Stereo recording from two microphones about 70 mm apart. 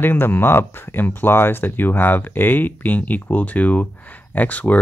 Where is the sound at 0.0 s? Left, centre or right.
Left.